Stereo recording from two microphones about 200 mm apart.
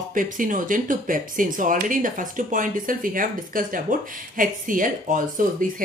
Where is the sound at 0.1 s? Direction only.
40° right (ahead or behind).